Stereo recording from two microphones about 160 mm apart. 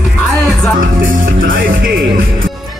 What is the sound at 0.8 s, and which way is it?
Speech, 60° right (ahead or behind).